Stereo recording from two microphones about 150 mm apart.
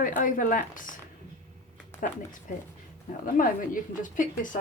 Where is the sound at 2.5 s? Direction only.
65° left (ahead or behind).